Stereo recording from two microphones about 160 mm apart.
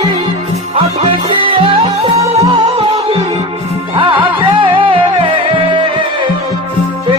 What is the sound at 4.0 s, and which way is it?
Music, 30° right (ahead or behind).